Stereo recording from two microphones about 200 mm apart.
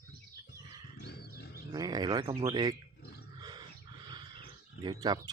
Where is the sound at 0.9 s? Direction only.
50° left (ahead or behind).